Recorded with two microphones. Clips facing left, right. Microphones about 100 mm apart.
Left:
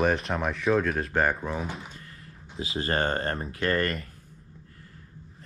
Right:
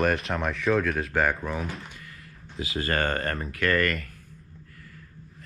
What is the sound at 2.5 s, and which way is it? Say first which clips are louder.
Speech: even; 30° left (ahead or behind).